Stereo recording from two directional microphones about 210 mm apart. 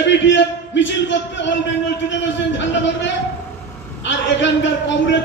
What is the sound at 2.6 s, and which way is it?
Speech, 60° left (ahead or behind).